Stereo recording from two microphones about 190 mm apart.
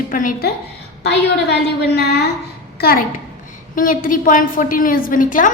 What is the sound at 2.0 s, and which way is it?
A woman's voice, 60° left (ahead or behind).